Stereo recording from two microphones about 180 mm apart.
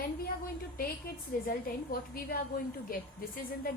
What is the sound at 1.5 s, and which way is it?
A woman's voice, 55° left (ahead or behind).